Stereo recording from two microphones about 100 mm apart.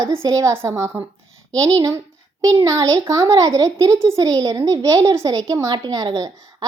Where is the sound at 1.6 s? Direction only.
35° right (ahead or behind).